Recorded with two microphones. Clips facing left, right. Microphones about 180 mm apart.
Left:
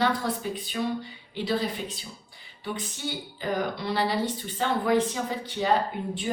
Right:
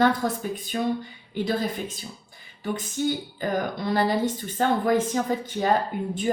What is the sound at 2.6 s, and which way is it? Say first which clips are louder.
Speech: right 7 dB; 45° right (ahead or behind).